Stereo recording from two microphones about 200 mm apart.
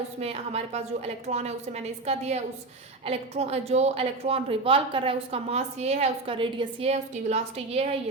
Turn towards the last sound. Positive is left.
turn(degrees=-30)  # may be behind; listen again after turning